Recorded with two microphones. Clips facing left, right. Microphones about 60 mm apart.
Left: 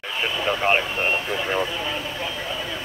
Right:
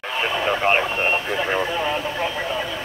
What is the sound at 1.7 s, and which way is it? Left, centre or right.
Speech, right.